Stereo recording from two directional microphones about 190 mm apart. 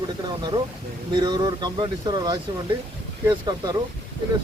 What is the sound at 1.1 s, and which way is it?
Speech, 20° right (ahead or behind).